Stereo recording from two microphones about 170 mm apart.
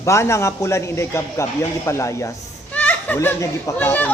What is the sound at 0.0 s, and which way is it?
A man's voice, 15° left (ahead or behind).